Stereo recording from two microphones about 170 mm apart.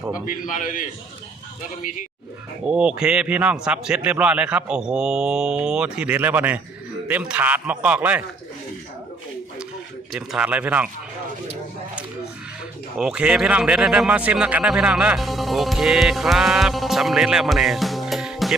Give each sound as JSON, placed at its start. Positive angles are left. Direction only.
{"t": 0.3, "sound": "a man's voice", "side_deg": 50}
{"t": 2.6, "sound": "a man's voice", "side_deg": -5}
{"t": 10.2, "sound": "a man's voice", "side_deg": -5}
{"t": 13.0, "sound": "speech", "side_deg": -5}